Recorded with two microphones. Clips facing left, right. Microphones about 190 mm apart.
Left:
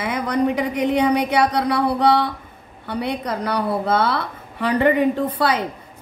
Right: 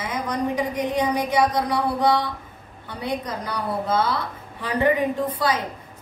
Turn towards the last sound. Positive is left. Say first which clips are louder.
# left 3 dB
turn(degrees=65)  # may be behind; listen again after turning